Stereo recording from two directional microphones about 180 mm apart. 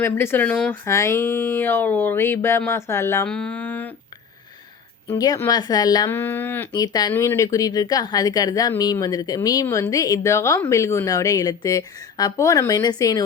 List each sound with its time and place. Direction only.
0.0 s speech: 10° left (ahead or behind)
3.2 s mantra: 5° left (ahead or behind)
5.0 s speech: 20° left (ahead or behind)